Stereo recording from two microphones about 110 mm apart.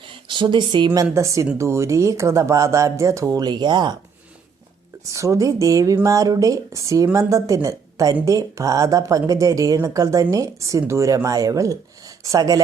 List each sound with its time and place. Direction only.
0.0 s a sound: 50° right (ahead or behind)
1.1 s speech: 30° right (ahead or behind)
5.1 s speech: 30° right (ahead or behind)